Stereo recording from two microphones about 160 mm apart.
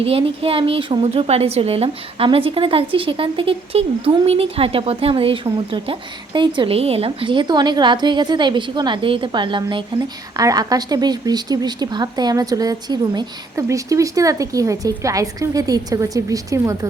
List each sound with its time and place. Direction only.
0.0 s a woman's voice: 35° right (ahead or behind)